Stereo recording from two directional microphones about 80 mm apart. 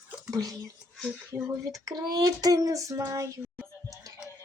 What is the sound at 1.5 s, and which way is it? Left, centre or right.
Child singing, right.